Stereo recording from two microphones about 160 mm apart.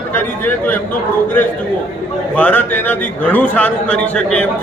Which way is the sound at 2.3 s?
10° left (ahead or behind).